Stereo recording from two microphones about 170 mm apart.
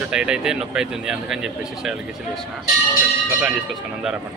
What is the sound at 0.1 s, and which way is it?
Speech, 5° right (ahead or behind).